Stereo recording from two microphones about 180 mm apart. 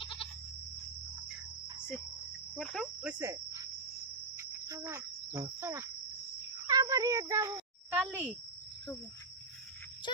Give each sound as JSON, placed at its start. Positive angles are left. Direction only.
{"t": 0.0, "sound": "goat", "side_deg": 30}
{"t": 2.6, "sound": "insect", "side_deg": 0}
{"t": 6.7, "sound": "a child's voice", "side_deg": -20}